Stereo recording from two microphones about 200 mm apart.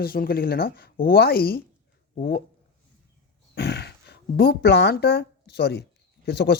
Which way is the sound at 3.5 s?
55° left (ahead or behind).